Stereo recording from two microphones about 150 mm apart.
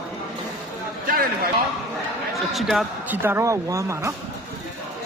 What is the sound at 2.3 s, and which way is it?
Speech, centre (ahead or behind).